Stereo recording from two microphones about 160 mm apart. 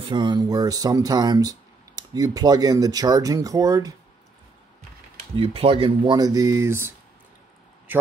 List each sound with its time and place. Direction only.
0.0 s speech: 30° right (ahead or behind)
5.3 s speech: 35° right (ahead or behind); by 6.9 s 15° right (ahead or behind)